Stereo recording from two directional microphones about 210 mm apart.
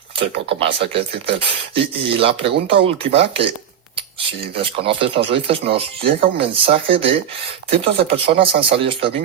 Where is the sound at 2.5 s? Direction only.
50° right (ahead or behind).